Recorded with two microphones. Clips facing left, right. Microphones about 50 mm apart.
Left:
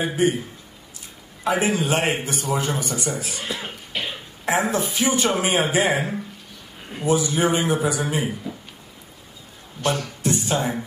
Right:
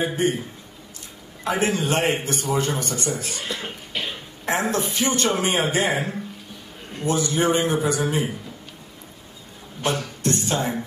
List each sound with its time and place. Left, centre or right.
0.0 s a man's voice: centre
1.4 s a man's voice: centre
9.8 s music: centre